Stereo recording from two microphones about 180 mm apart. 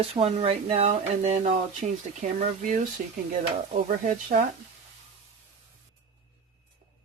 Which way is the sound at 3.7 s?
45° right (ahead or behind).